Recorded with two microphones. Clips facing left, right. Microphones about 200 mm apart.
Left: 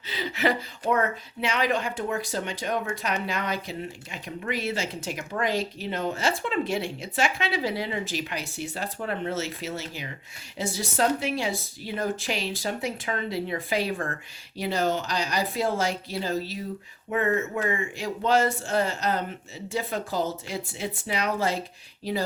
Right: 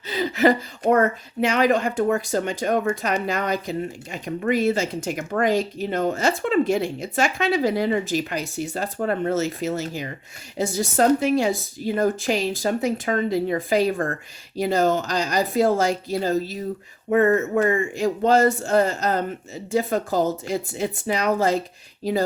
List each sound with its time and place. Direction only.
0.1 s speech: 45° right (ahead or behind)